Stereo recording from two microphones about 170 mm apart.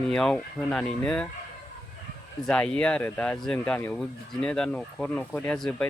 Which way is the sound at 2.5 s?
5° left (ahead or behind).